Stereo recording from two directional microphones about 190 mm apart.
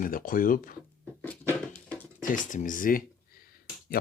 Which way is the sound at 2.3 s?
45° left (ahead or behind).